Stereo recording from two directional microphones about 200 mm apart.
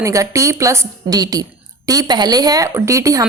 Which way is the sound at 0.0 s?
15° right (ahead or behind).